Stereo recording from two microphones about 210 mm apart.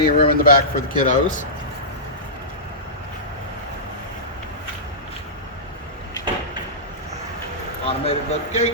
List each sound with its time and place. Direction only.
0.0 s speech: 45° left (ahead or behind)
7.9 s speech: 30° left (ahead or behind)